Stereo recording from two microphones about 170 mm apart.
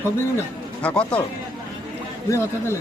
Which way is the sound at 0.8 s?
5° left (ahead or behind).